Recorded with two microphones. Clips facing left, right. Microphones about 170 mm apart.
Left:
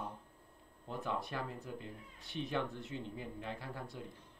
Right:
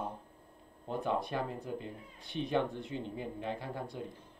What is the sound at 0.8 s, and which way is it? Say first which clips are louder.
Speech: right 6 dB; 30° right (ahead or behind).